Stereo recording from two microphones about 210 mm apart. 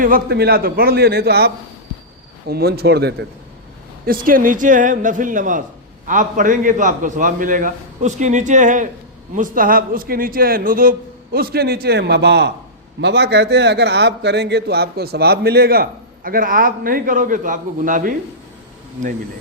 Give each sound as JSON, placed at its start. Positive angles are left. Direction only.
{"t": 0.0, "sound": "a man's voice", "side_deg": -45}